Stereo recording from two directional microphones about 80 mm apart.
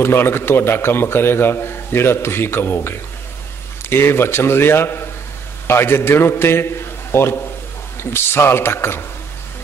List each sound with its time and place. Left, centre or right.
0.0 s a man's voice: left
3.9 s a man's voice: left